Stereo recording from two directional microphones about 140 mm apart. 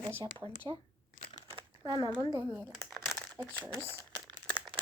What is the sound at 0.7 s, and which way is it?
Speech, 45° right (ahead or behind).